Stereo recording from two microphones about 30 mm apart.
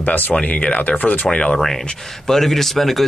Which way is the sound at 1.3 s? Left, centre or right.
Left.